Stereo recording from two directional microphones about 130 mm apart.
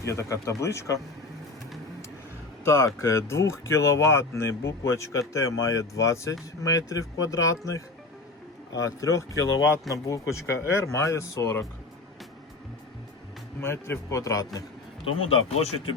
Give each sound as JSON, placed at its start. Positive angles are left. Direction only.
{"t": 0.0, "sound": "speech", "side_deg": 25}
{"t": 2.6, "sound": "speech", "side_deg": 20}
{"t": 13.6, "sound": "speech", "side_deg": 20}
{"t": 15.0, "sound": "speech", "side_deg": 45}